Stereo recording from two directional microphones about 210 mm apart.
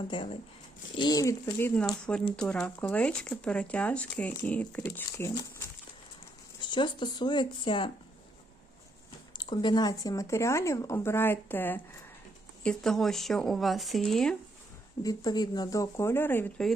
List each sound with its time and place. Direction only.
0.1 s speech: 20° left (ahead or behind)
9.3 s speech: 20° left (ahead or behind); by 14.3 s centre (ahead or behind)
15.0 s speech: 20° left (ahead or behind)